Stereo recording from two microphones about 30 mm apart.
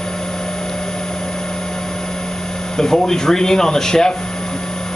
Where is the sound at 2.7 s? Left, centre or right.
Centre.